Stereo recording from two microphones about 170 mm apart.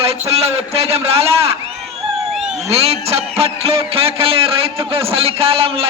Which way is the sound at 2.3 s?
5° right (ahead or behind).